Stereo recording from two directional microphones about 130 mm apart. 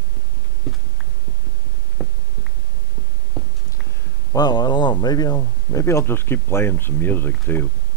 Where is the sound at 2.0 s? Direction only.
Centre (ahead or behind).